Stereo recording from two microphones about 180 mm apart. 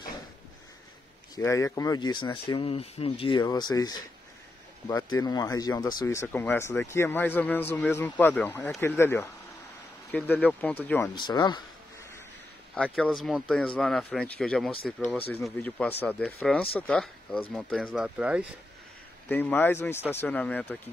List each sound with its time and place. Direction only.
1.3 s a man's voice: 20° left (ahead or behind)
11.1 s speech: 25° left (ahead or behind)
12.7 s a man's voice: 5° left (ahead or behind)
19.2 s a man's voice: 10° left (ahead or behind)